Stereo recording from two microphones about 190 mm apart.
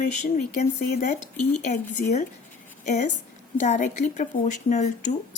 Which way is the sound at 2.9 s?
40° left (ahead or behind).